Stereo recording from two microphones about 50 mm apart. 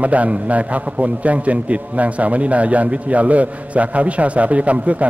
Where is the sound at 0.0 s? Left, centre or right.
Right.